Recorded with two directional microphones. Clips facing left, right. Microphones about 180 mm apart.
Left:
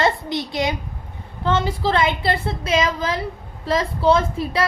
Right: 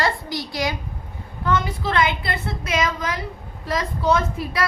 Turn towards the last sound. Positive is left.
turn(degrees=30)  # may be behind; listen again after turning